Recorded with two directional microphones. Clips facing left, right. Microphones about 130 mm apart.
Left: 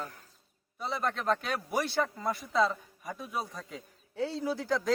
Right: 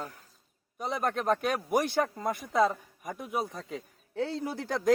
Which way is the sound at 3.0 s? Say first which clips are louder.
Right 2 dB; 15° right (ahead or behind).